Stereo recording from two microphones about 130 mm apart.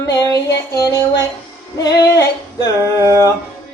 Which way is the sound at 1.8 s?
30° left (ahead or behind).